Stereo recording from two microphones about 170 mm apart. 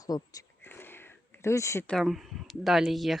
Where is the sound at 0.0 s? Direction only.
20° left (ahead or behind).